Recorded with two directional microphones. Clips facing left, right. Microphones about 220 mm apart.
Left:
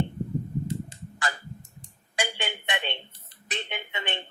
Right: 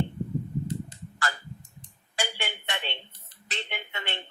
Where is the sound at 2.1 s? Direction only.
20° left (ahead or behind).